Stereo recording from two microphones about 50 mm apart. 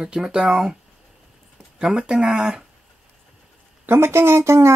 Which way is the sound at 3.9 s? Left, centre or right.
Right.